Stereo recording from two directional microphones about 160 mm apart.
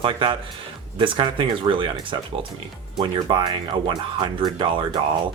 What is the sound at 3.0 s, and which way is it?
Speech, 30° right (ahead or behind).